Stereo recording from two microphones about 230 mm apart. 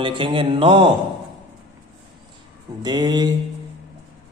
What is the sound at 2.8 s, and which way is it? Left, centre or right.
Speech, centre.